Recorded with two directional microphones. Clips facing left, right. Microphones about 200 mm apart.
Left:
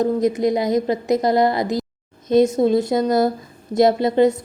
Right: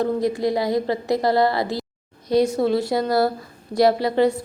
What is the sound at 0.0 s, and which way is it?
A woman's voice, 20° left (ahead or behind).